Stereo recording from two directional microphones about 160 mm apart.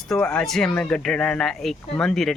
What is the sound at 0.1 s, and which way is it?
Speech, 5° left (ahead or behind).